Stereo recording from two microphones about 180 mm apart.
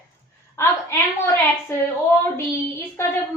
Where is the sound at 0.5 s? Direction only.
15° left (ahead or behind).